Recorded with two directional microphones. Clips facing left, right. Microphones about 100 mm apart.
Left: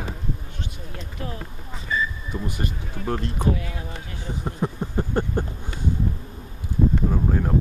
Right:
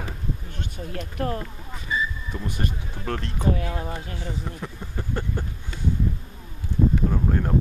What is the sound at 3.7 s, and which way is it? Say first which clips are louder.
Speech: right 4 dB; 40° right (ahead or behind).